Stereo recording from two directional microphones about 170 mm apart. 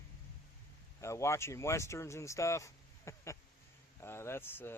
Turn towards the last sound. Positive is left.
turn(degrees=15)  # may be behind; listen again after turning